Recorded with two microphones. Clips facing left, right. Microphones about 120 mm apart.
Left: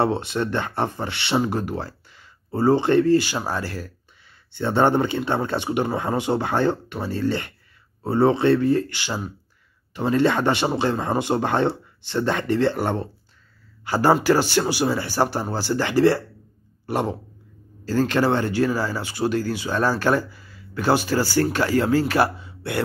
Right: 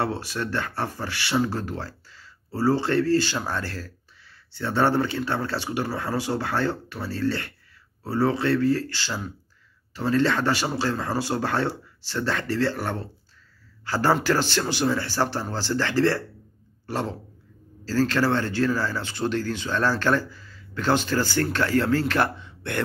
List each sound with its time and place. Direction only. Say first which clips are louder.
0.0 s speech: left 5 dB; 20° left (ahead or behind)